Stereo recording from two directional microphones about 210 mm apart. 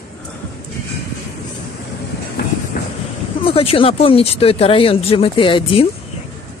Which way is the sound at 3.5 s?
25° left (ahead or behind).